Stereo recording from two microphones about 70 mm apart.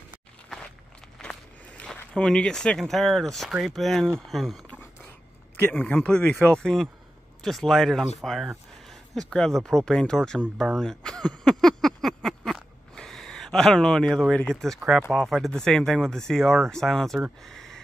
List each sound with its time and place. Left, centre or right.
1.2 s walk: centre
1.8 s speech: centre
5.7 s speech: left; by 10.4 s centre
10.6 s a sound: centre
14.3 s speech: centre
14.8 s speech: centre
17.4 s a sound: centre